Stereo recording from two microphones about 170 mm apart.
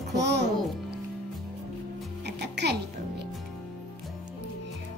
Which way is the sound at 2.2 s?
85° right.